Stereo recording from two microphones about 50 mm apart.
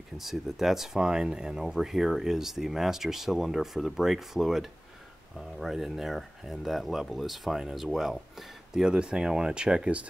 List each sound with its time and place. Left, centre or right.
0.2 s speech: centre
8.8 s speech: centre